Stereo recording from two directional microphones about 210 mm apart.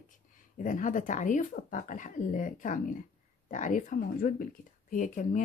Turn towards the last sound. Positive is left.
turn(degrees=35)  # may be behind; listen again after turning